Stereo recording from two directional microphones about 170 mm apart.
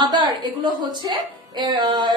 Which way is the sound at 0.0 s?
25° right (ahead or behind).